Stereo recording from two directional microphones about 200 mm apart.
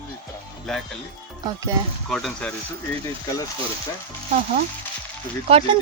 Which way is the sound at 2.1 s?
Centre (ahead or behind).